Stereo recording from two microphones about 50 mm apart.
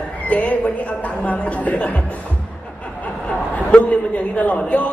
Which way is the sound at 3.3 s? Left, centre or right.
Left.